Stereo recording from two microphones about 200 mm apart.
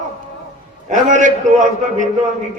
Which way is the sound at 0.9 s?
40° right (ahead or behind).